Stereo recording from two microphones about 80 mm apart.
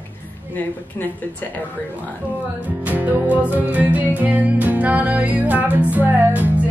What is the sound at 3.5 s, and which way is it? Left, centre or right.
Music, centre.